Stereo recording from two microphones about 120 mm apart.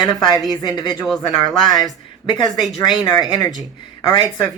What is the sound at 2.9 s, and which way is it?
Speech, 35° left (ahead or behind).